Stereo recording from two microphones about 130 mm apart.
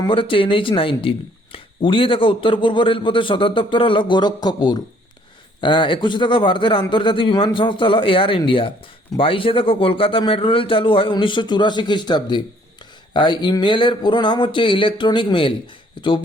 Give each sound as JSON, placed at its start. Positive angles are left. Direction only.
{"t": 0.1, "sound": "speech", "side_deg": 40}